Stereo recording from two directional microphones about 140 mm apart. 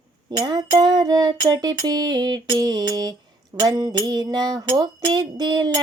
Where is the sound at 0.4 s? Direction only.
30° right (ahead or behind).